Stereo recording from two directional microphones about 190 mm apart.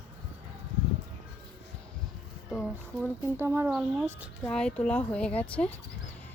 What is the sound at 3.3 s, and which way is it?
Speech, 10° right (ahead or behind).